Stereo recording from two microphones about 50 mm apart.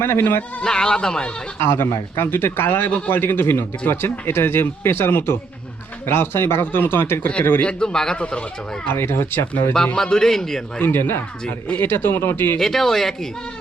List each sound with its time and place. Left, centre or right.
0.0 s speech: left
0.6 s a man's voice: centre
1.5 s speech: left
7.6 s a man's voice: centre
8.9 s speech: left
9.7 s a man's voice: centre
10.9 s speech: left
12.5 s speech: centre